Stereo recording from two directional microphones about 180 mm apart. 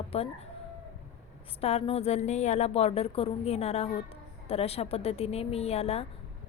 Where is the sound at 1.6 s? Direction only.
35° left (ahead or behind).